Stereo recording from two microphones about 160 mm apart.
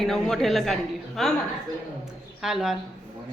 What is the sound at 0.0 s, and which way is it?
A woman's voice, centre (ahead or behind).